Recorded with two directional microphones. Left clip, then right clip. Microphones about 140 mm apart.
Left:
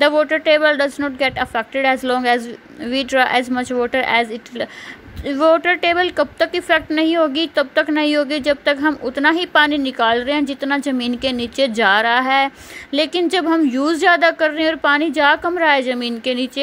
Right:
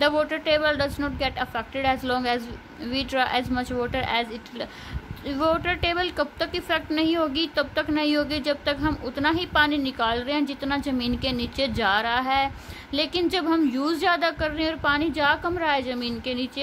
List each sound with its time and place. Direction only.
0.0 s a woman's voice: 35° left (ahead or behind)